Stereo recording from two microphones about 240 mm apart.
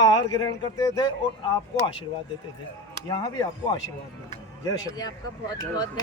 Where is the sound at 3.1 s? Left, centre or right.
Centre.